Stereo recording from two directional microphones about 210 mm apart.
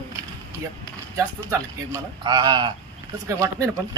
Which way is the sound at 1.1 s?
15° right (ahead or behind).